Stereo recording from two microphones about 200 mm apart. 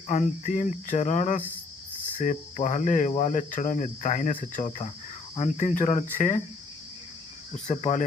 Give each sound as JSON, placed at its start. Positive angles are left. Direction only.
{"t": 0.1, "sound": "speech", "side_deg": 35}
{"t": 7.7, "sound": "speech", "side_deg": 35}